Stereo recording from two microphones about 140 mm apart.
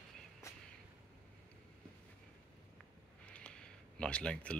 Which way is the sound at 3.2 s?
5° left (ahead or behind).